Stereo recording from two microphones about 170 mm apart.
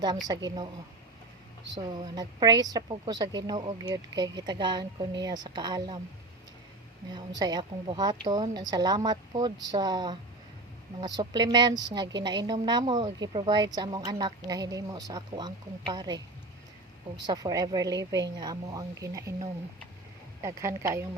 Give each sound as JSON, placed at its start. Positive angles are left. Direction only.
{"t": 0.3, "sound": "a woman's voice", "side_deg": -20}
{"t": 1.7, "sound": "a woman's voice", "side_deg": -25}
{"t": 7.1, "sound": "a woman's voice", "side_deg": -25}
{"t": 17.2, "sound": "a woman's voice", "side_deg": -20}
{"t": 20.4, "sound": "speech", "side_deg": -15}